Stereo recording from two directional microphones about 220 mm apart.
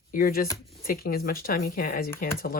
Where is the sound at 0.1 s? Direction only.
40° left (ahead or behind).